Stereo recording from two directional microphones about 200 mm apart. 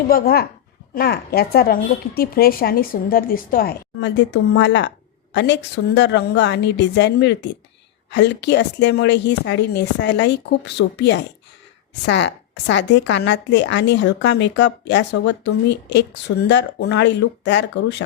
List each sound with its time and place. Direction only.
0.1 s a woman's voice: 50° left (ahead or behind)